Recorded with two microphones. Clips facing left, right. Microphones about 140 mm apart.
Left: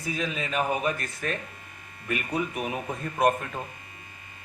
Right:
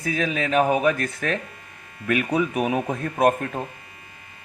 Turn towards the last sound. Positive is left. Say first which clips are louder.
# right 4 dB
turn(degrees=-50)  # may be behind; listen again after turning